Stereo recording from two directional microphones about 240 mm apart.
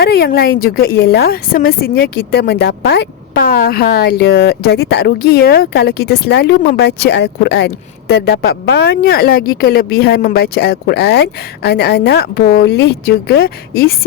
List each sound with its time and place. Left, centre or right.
0.0 s a woman's voice: left